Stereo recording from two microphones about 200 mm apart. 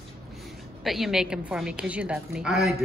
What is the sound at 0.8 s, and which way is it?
A woman's voice, centre (ahead or behind).